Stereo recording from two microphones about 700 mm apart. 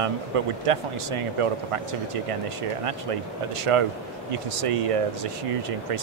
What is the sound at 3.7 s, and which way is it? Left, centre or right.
Speech, right.